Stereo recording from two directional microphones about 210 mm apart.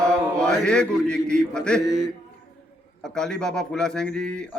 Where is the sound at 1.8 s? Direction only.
15° left (ahead or behind).